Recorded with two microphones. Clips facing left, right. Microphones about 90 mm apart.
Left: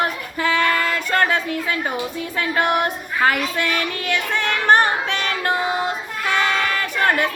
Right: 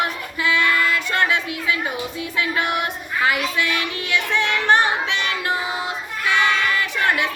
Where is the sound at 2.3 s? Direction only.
45° left (ahead or behind).